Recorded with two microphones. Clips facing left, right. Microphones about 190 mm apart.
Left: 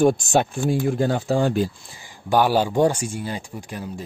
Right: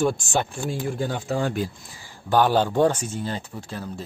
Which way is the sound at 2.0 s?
10° left (ahead or behind).